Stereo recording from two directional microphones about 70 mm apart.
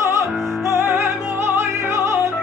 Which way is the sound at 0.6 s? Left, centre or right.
Right.